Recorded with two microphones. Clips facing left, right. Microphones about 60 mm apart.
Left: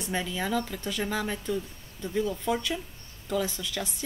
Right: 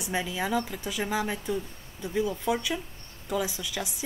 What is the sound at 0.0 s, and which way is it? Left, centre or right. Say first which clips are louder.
A woman's voice: right 1 dB; centre.